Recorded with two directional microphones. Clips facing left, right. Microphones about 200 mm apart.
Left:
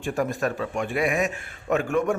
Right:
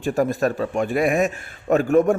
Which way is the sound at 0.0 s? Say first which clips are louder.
Right 5 dB; 35° right (ahead or behind).